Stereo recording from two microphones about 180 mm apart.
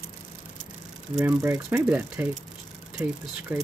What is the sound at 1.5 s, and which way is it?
Speech, 10° right (ahead or behind).